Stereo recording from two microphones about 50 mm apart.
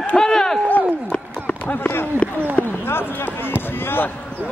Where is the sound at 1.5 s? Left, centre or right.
Left.